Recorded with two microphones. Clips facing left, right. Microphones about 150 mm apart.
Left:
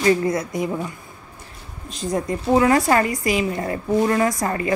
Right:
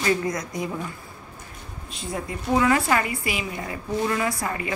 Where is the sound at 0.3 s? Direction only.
25° left (ahead or behind).